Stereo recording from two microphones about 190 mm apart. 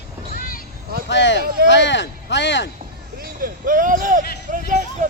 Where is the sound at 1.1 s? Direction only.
70° left (ahead or behind).